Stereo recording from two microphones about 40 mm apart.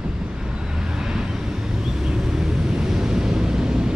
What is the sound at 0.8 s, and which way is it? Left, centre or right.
Vehicle, centre.